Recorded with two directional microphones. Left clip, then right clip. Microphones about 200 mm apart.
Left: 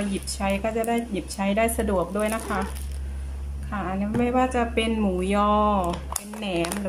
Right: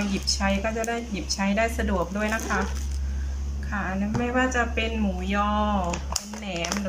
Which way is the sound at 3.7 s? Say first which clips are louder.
Even; 15° left (ahead or behind).